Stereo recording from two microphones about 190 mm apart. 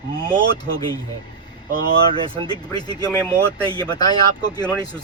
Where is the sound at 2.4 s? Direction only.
20° left (ahead or behind).